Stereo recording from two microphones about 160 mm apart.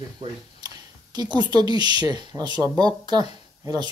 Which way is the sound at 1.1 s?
25° right (ahead or behind).